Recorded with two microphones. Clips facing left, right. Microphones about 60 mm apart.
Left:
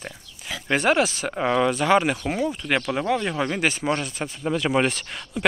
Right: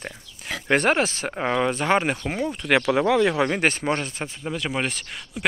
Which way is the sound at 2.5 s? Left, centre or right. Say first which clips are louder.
Right 4 dB; right.